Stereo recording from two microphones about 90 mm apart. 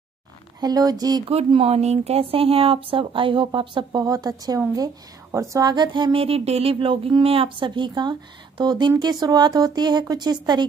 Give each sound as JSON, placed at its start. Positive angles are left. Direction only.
{"t": 0.6, "sound": "a woman's voice", "side_deg": -45}
{"t": 1.5, "sound": "speech", "side_deg": -90}
{"t": 4.0, "sound": "a woman's voice", "side_deg": -45}